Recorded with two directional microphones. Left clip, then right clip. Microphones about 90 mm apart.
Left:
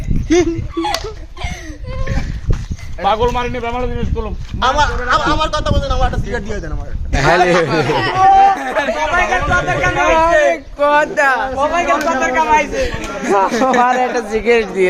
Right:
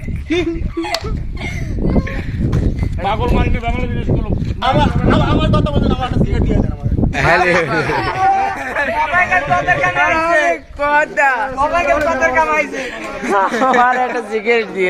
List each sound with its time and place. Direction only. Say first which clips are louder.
3.0 s a man's voice: left 3 dB; 20° left (ahead or behind)